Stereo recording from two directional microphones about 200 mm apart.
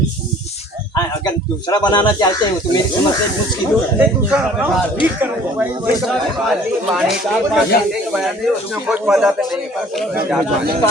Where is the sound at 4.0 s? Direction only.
5° right (ahead or behind).